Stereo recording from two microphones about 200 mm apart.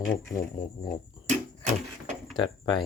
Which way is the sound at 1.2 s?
35° right (ahead or behind).